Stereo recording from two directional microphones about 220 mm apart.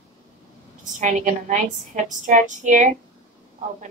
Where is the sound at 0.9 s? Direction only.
35° right (ahead or behind).